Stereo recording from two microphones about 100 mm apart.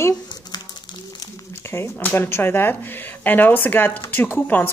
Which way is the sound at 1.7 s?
20° left (ahead or behind).